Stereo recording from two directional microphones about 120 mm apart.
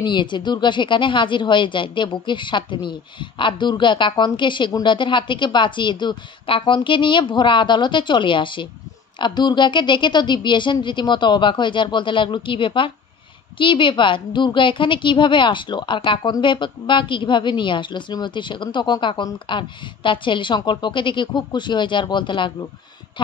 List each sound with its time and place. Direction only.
0.0 s a woman's voice: 40° left (ahead or behind)